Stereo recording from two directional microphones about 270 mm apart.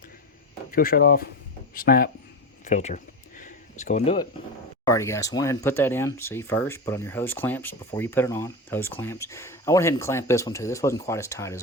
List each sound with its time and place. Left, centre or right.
0.7 s speech: left
2.6 s a sound: left
4.9 s speech: centre